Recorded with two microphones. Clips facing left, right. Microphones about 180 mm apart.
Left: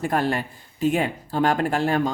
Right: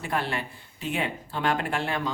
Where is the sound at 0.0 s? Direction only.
45° left (ahead or behind).